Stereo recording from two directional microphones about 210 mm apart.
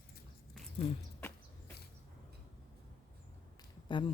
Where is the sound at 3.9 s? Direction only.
20° left (ahead or behind).